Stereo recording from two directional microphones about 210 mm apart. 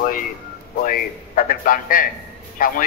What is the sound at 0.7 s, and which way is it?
Speech, 40° left (ahead or behind).